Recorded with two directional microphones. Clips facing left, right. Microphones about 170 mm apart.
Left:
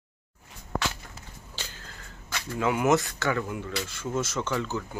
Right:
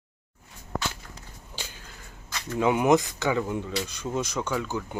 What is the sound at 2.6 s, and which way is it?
Speech, 20° right (ahead or behind).